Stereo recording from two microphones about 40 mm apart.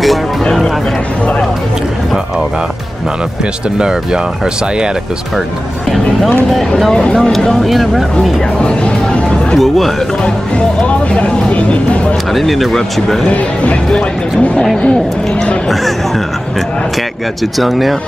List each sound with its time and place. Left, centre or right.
3.7 s speech: right
6.9 s speech: left
7.3 s speech: centre
8.5 s speech: left
9.6 s speech: centre
10.2 s speech: left
11.5 s speech: left
12.3 s speech: centre
17.6 s speech: centre